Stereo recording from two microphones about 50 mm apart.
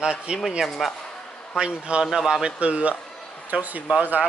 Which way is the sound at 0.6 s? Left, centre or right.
Centre.